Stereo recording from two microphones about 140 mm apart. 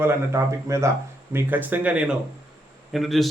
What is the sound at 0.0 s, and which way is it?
A man's voice, 20° right (ahead or behind).